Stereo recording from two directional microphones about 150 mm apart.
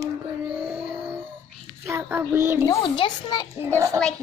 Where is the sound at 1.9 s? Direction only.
15° right (ahead or behind).